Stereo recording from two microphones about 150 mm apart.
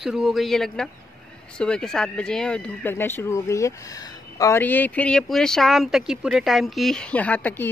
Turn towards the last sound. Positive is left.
turn(degrees=10)  # may be behind; listen again after turning